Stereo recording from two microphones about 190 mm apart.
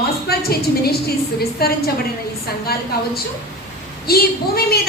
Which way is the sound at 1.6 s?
55° left (ahead or behind).